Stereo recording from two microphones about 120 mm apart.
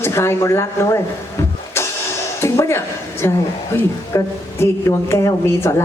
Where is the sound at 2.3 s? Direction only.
25° left (ahead or behind).